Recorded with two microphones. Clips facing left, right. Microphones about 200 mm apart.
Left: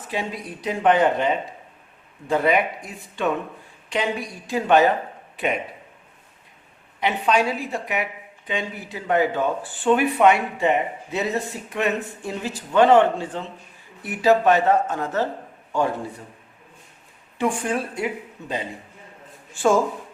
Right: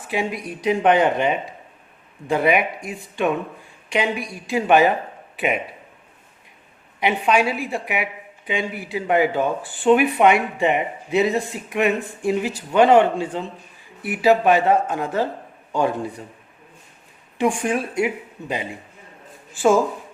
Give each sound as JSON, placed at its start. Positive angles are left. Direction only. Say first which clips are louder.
{"t": 0.1, "sound": "speech", "louder": "right 4 dB", "side_deg": -10}
{"t": 7.0, "sound": "speech", "louder": "right 2 dB", "side_deg": -10}
{"t": 17.3, "sound": "speech", "louder": "right 3 dB", "side_deg": -15}